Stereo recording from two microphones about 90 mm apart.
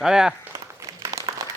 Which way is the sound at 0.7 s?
35° right (ahead or behind).